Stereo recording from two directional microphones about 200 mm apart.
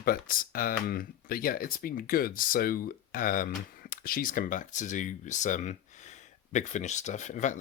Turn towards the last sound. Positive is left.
turn(degrees=35)  # may be behind; listen again after turning